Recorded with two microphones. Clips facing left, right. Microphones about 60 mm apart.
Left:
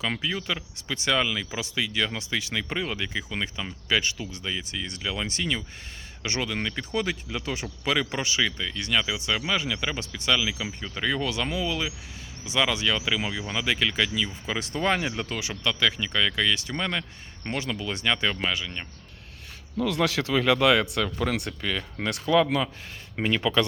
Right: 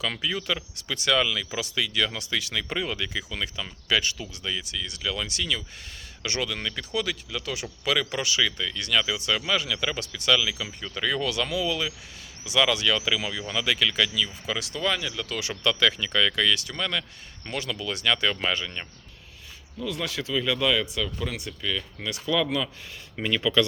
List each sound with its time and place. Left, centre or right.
0.0 s speech: left
15.4 s speech: centre
18.4 s speech: centre
19.7 s speech: left
23.1 s speech: left